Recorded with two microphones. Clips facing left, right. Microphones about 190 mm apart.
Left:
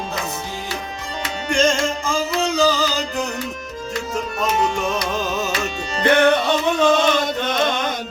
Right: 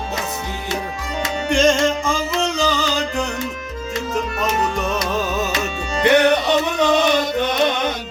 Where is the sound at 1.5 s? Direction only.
Centre (ahead or behind).